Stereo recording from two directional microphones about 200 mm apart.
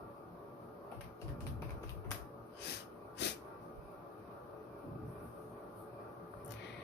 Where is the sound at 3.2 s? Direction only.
60° left (ahead or behind).